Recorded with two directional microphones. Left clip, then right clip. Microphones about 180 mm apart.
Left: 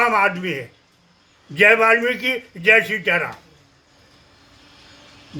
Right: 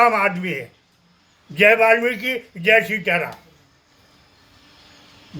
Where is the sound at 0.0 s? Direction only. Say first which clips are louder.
Right 1 dB; 15° left (ahead or behind).